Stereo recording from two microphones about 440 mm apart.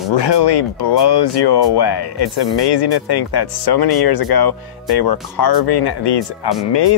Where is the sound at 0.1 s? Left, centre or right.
Left.